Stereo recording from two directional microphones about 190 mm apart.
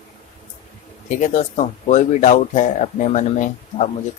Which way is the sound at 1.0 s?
40° left (ahead or behind).